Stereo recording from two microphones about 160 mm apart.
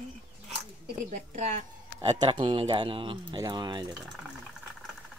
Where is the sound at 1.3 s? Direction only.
45° right (ahead or behind); by 3.8 s 25° right (ahead or behind).